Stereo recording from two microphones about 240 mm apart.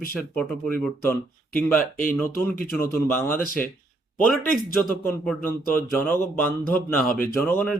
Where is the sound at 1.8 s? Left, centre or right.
Left.